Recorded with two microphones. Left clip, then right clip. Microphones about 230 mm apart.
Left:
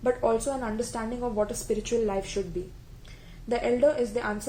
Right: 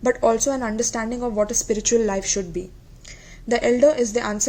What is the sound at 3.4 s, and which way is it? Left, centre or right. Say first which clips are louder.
Speech: right 7 dB; right.